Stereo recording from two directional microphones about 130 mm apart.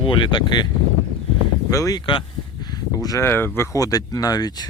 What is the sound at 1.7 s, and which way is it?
Speech, 25° left (ahead or behind).